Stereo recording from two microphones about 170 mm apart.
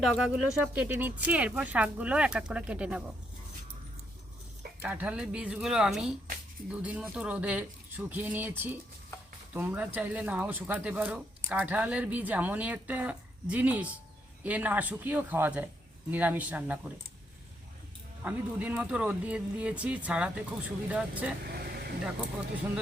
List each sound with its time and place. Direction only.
0.0 s speech: centre (ahead or behind)
4.8 s speech: 10° right (ahead or behind)
18.2 s speech: 10° right (ahead or behind)
21.4 s vehicle: 65° right (ahead or behind)